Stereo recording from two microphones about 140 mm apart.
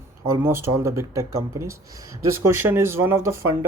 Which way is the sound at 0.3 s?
15° right (ahead or behind).